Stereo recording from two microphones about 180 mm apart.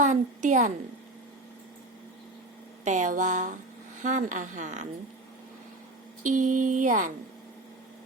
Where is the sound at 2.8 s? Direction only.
45° right (ahead or behind).